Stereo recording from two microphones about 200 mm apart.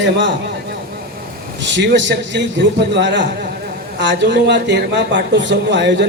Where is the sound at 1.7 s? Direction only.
65° right (ahead or behind).